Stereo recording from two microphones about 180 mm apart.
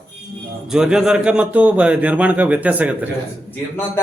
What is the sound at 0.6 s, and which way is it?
A man's voice, 5° right (ahead or behind).